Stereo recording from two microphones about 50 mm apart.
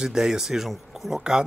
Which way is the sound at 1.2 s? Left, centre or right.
Centre.